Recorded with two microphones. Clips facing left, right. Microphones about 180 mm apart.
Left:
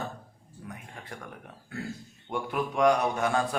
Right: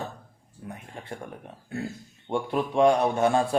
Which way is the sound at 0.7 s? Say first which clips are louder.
Right 5 dB; 25° right (ahead or behind).